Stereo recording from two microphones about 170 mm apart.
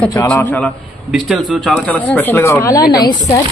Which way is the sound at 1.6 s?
5° left (ahead or behind).